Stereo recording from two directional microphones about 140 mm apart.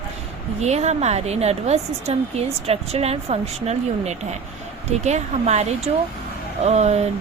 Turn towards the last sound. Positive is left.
turn(degrees=-50)  # may be behind; listen again after turning